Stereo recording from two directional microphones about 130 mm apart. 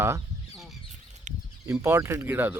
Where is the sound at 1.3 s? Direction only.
70° right (ahead or behind).